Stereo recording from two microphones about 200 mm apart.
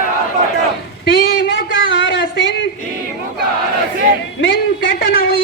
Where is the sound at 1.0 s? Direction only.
65° left (ahead or behind).